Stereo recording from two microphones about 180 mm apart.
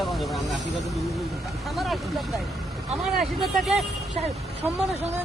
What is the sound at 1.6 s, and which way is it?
Speech, centre (ahead or behind).